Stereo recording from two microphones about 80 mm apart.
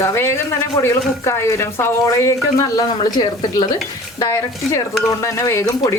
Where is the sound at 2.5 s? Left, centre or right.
Left.